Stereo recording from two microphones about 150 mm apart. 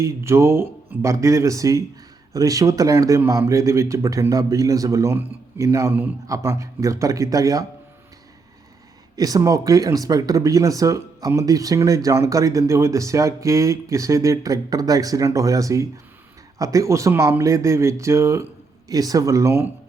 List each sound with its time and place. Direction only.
0.0 s speech: 20° right (ahead or behind)
9.1 s speech: 25° right (ahead or behind)